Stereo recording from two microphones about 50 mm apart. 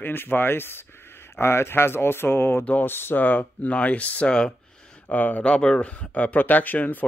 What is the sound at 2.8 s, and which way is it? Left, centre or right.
Speech, left.